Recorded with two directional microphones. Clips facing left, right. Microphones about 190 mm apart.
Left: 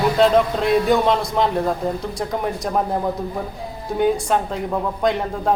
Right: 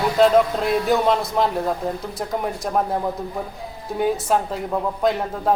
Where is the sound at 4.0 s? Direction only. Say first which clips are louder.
Left 2 dB; 5° right (ahead or behind).